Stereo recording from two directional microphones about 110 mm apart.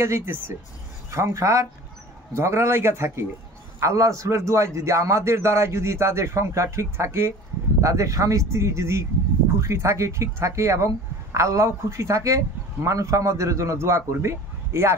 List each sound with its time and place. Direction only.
0.0 s speech: 25° right (ahead or behind)